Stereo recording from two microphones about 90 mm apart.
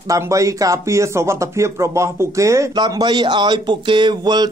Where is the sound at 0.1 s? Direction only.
35° right (ahead or behind).